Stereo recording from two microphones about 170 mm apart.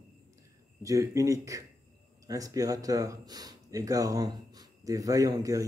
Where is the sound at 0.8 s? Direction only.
20° right (ahead or behind).